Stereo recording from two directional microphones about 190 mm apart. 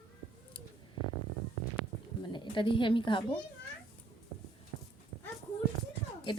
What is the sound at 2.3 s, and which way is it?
Speech, 25° left (ahead or behind).